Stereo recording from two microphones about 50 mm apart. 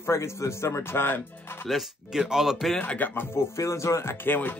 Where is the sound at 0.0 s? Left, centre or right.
Left.